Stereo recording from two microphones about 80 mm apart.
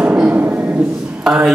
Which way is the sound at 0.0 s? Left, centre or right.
Right.